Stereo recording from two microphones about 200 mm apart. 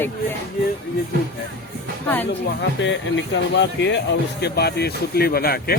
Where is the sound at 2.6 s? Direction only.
65° left (ahead or behind).